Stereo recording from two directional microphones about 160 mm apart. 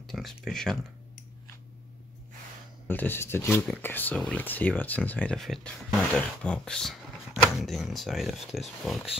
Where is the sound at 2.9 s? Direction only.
15° left (ahead or behind).